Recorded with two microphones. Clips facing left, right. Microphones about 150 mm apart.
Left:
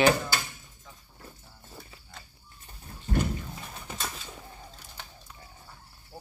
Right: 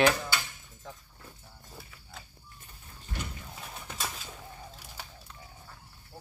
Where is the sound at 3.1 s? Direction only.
35° left (ahead or behind).